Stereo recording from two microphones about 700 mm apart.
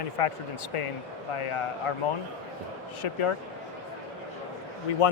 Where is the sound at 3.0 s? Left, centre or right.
Left.